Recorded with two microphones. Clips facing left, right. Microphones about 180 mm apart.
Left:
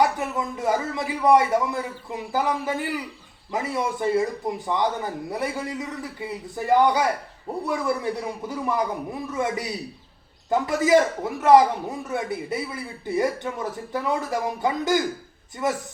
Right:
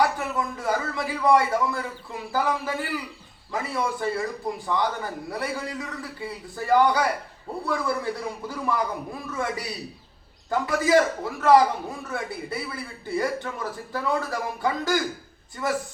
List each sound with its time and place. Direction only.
0.0 s a man's voice: 20° left (ahead or behind)